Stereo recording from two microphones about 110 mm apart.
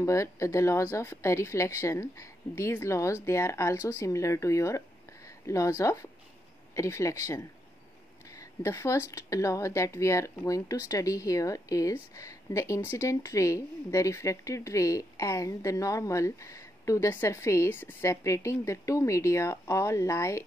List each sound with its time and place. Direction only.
0.0 s a woman's voice: 25° left (ahead or behind)